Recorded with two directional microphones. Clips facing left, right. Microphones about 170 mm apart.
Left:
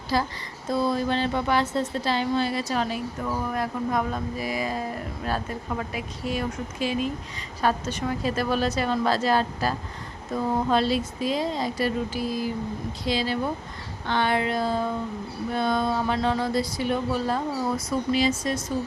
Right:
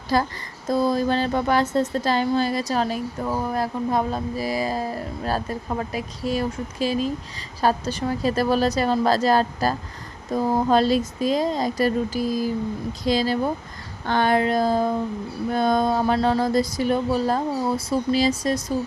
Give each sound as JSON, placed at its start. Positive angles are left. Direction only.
{"t": 0.1, "sound": "a woman's voice", "side_deg": -50}